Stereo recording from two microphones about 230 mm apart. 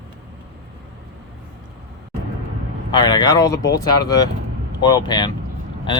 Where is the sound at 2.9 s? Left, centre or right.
Centre.